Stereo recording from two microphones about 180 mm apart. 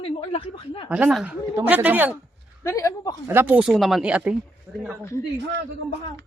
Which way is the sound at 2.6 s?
15° left (ahead or behind).